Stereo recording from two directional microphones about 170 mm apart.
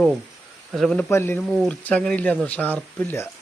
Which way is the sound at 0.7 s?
5° left (ahead or behind).